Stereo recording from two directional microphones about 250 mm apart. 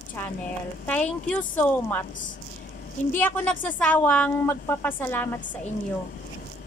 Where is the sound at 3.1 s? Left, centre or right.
Centre.